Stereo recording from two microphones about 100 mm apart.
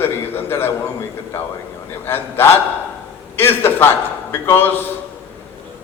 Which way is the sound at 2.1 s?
20° left (ahead or behind).